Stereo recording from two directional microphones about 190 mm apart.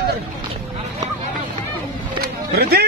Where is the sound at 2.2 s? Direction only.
55° right (ahead or behind).